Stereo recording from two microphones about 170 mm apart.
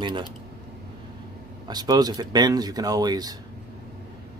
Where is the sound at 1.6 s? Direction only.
25° right (ahead or behind).